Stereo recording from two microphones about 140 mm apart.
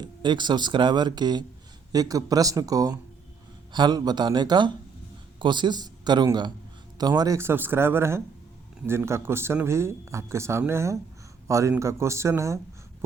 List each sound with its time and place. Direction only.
0.0 s a man's voice: 35° right (ahead or behind)